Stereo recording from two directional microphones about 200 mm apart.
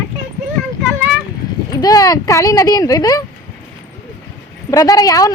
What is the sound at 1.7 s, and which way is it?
Speech, 20° left (ahead or behind).